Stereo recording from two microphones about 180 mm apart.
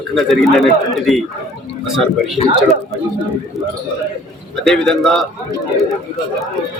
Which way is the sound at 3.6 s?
Centre (ahead or behind).